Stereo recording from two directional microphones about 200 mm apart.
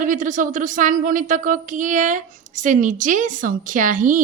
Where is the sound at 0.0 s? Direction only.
40° right (ahead or behind).